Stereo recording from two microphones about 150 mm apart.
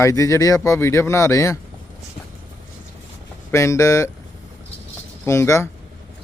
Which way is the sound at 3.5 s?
20° left (ahead or behind).